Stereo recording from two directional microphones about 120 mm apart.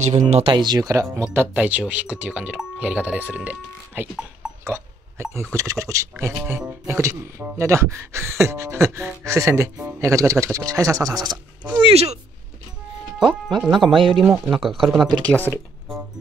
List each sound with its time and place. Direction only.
0.0 s speech: 70° right (ahead or behind)
0.7 s speech: 30° right (ahead or behind)
11.8 s speech: 60° right (ahead or behind)
13.6 s speech: centre (ahead or behind)
13.8 s speech: 45° right (ahead or behind)
14.2 s speech: 15° right (ahead or behind)
14.7 s speech: centre (ahead or behind)
15.2 s speech: 15° left (ahead or behind)